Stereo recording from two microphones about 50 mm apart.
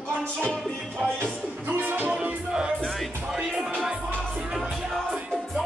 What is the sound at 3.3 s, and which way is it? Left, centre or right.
Music, centre.